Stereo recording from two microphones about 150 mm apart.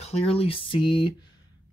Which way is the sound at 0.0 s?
45° left (ahead or behind).